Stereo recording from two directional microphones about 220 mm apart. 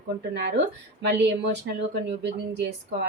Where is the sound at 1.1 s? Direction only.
55° right (ahead or behind).